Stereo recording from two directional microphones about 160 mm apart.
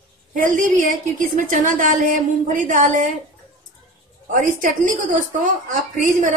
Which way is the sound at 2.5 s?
55° right (ahead or behind).